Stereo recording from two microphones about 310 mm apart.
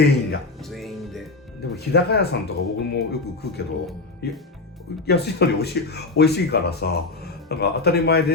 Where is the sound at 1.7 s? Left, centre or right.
Left.